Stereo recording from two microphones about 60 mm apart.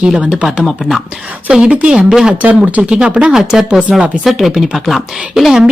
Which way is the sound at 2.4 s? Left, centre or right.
Right.